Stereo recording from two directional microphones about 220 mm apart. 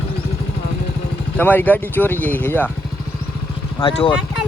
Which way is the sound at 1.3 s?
10° left (ahead or behind).